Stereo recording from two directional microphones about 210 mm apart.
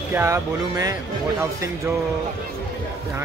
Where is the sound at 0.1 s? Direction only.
15° right (ahead or behind).